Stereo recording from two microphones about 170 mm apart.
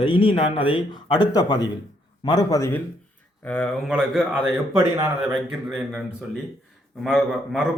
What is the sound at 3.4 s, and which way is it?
Speech, 5° left (ahead or behind).